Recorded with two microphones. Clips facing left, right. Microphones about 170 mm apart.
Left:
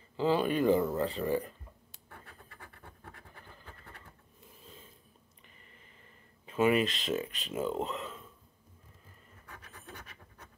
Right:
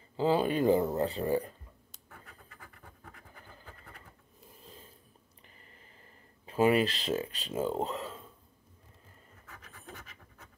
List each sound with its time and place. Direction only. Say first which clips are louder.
0.2 s speech: right 1 dB; 30° right (ahead or behind)
4.6 s sniff: right 1 dB; 35° right (ahead or behind)
6.4 s speech: right 1 dB; 35° right (ahead or behind)